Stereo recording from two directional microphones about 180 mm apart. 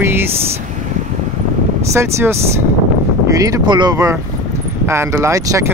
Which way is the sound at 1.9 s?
15° right (ahead or behind).